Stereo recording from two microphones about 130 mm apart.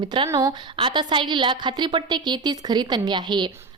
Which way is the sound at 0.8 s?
35° right (ahead or behind).